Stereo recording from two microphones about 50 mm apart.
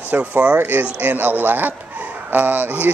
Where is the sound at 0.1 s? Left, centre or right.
Right.